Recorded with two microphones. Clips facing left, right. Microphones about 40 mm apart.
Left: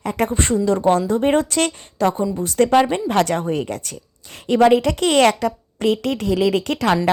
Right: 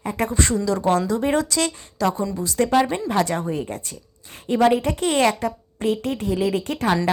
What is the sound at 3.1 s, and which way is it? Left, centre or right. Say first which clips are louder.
A woman's voice: left 3 dB; left.